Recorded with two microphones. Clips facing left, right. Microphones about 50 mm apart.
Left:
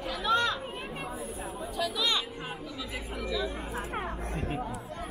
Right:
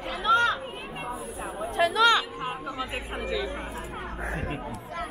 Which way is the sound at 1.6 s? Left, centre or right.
Right.